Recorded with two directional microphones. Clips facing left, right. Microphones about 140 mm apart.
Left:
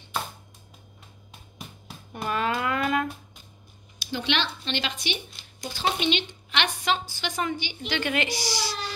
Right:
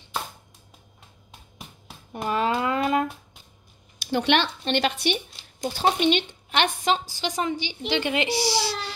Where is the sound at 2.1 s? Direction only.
25° right (ahead or behind).